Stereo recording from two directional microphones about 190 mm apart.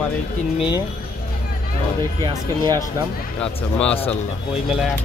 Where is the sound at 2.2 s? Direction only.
20° right (ahead or behind).